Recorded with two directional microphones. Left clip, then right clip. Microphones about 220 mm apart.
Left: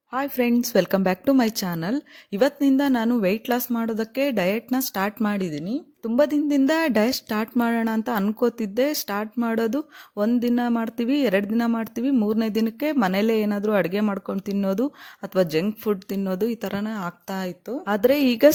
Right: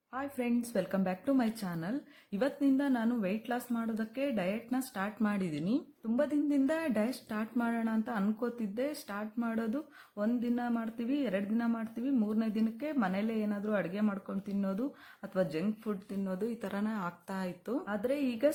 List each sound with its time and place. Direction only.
0.1 s speech: 40° left (ahead or behind); by 5.8 s 20° left (ahead or behind)
6.1 s speech: 40° left (ahead or behind)
17.8 s speech: 45° left (ahead or behind)